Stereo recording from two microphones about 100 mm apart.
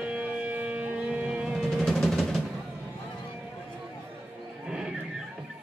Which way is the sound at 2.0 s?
Centre (ahead or behind).